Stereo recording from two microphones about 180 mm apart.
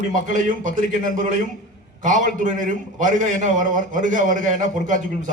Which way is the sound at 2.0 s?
45° right (ahead or behind).